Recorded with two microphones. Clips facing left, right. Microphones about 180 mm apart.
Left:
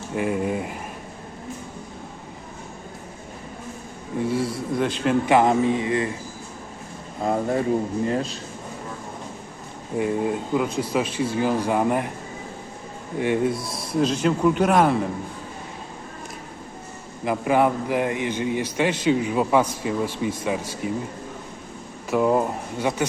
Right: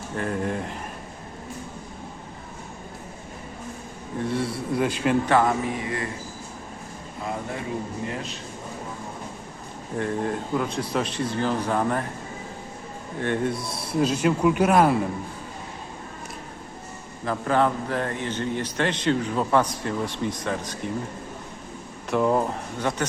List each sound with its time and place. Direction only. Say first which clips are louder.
0.2 s a man's voice: left 3 dB; 10° left (ahead or behind)
4.3 s a sound: left 2 dB; centre (ahead or behind)
4.7 s a man's voice: even; 10° right (ahead or behind)
5.2 s speech: left 4 dB; 15° left (ahead or behind)
7.2 s speech: left 9 dB; 40° left (ahead or behind)
10.0 s a man's voice: left 3 dB; 10° left (ahead or behind)
13.1 s a man's voice: left 4 dB; 10° left (ahead or behind)
14.0 s speech: left 1 dB; 5° right (ahead or behind)
17.2 s a man's voice: left 3 dB; 10° left (ahead or behind)
22.1 s a man's voice: left 2 dB; 5° left (ahead or behind)